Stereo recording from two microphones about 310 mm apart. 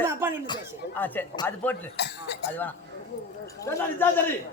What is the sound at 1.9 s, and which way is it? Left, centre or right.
Speech, left.